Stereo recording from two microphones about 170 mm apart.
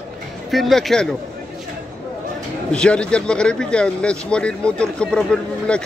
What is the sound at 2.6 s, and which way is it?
Speech, 5° left (ahead or behind).